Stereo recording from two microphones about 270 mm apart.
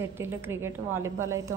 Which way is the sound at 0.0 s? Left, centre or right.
Centre.